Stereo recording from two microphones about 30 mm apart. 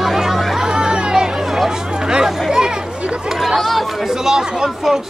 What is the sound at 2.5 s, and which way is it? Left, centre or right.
Chatter, right.